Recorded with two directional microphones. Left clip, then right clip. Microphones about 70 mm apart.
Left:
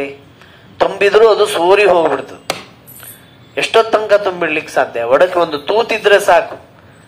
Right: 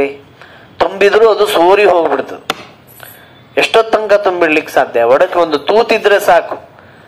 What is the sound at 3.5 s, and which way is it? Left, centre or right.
A man's voice, right.